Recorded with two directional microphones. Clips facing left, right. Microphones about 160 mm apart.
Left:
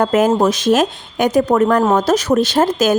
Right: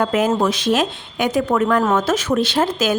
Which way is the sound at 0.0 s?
45° left (ahead or behind).